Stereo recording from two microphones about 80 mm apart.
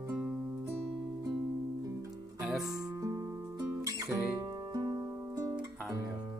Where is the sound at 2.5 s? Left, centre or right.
Centre.